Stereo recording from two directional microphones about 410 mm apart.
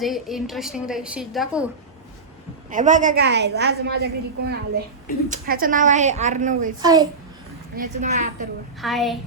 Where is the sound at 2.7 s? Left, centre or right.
Centre.